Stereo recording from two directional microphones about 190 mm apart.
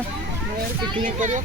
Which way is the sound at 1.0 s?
40° right (ahead or behind).